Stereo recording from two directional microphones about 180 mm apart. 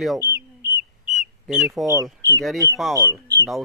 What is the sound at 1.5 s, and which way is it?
Speech, centre (ahead or behind).